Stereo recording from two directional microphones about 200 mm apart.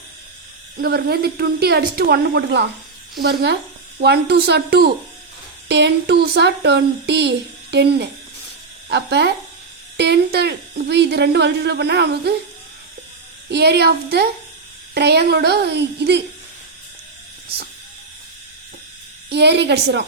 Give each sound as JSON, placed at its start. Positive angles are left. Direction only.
{"t": 0.8, "sound": "a woman's voice", "side_deg": -50}
{"t": 13.5, "sound": "a woman's voice", "side_deg": -55}
{"t": 19.3, "sound": "speech", "side_deg": -55}